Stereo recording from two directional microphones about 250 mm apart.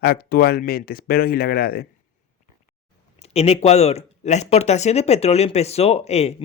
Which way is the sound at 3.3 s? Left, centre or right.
Left.